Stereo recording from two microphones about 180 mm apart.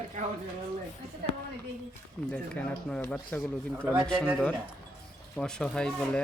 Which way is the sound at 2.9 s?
5° left (ahead or behind).